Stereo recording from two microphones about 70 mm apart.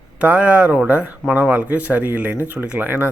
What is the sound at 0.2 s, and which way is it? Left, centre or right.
Speech, right.